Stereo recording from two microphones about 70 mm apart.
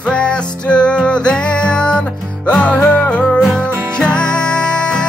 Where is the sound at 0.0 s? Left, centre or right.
Centre.